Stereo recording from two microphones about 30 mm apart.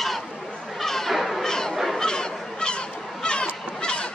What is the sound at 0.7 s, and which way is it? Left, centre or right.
Cat, centre.